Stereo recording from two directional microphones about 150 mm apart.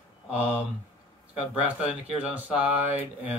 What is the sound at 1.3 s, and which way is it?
Speech, 5° right (ahead or behind).